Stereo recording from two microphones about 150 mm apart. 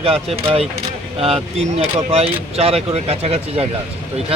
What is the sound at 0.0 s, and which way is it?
Speech, 40° right (ahead or behind).